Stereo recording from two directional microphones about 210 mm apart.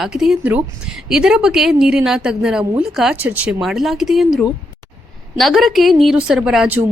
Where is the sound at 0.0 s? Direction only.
Centre (ahead or behind).